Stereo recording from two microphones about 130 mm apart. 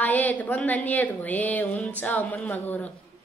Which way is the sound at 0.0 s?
15° left (ahead or behind).